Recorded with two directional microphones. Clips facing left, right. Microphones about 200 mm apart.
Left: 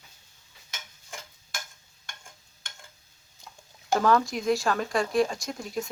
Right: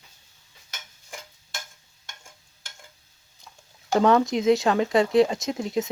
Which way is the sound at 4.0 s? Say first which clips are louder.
Right 5 dB; 25° right (ahead or behind).